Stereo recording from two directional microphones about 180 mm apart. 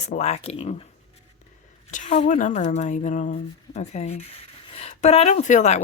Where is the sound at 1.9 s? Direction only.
40° left (ahead or behind).